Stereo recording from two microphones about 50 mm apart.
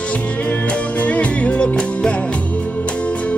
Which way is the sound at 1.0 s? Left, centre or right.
Left.